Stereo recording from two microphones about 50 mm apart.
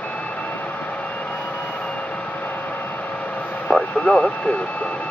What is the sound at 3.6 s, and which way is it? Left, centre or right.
Vehicle, left.